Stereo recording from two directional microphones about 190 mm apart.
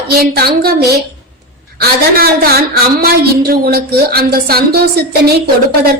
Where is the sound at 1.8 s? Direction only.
50° right (ahead or behind).